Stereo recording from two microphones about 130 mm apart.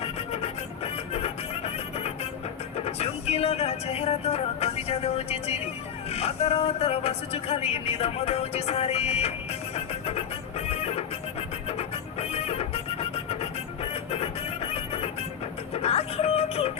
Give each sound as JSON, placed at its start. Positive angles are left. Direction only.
{"t": 0.0, "sound": "music", "side_deg": 50}
{"t": 6.1, "sound": "speech", "side_deg": 50}
{"t": 9.7, "sound": "music", "side_deg": 50}